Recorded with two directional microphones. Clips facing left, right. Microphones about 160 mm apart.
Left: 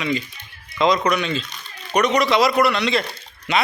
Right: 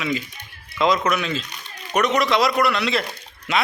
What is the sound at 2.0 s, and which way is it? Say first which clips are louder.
A man's voice: left 2 dB; centre (ahead or behind).